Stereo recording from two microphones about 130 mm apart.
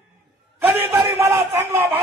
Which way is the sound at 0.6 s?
15° right (ahead or behind).